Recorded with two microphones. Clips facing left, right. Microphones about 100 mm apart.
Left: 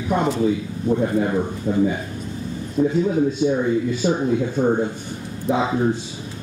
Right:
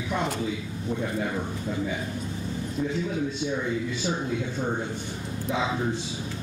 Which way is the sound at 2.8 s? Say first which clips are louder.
Left 10 dB; 40° left (ahead or behind).